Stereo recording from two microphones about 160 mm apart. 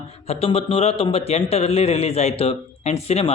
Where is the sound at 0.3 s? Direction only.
35° left (ahead or behind).